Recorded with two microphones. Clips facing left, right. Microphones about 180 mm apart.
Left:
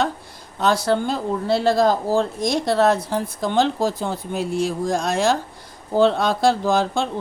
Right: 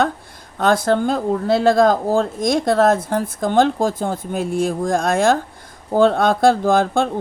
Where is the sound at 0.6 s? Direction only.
50° right (ahead or behind).